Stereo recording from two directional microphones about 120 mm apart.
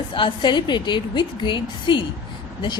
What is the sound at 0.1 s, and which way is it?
A woman's voice, 40° left (ahead or behind).